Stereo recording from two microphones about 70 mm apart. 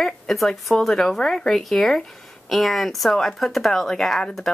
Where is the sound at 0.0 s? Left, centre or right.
Centre.